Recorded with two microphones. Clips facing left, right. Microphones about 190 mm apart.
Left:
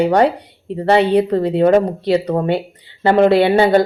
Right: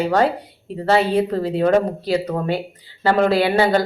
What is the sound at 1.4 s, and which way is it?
Speech, 25° left (ahead or behind).